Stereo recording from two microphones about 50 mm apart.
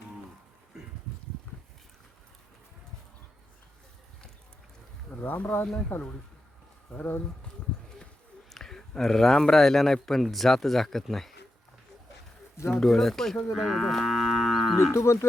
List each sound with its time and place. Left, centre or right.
5.2 s speech: left
8.5 s a sound: centre
9.5 s a man's voice: centre
12.7 s a man's voice: centre
13.5 s moo: centre
14.9 s speech: left